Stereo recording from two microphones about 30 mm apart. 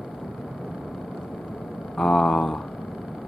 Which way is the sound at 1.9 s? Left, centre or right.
Left.